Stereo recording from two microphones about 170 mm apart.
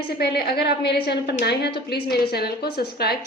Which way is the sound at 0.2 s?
70° left (ahead or behind).